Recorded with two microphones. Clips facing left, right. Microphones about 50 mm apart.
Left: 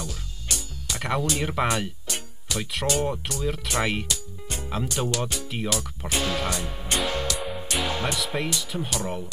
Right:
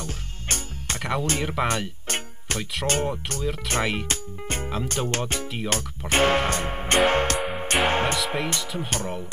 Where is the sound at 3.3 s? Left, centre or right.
Right.